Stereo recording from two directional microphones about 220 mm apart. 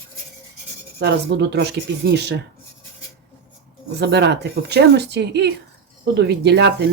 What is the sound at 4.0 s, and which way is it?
Speech, 50° right (ahead or behind).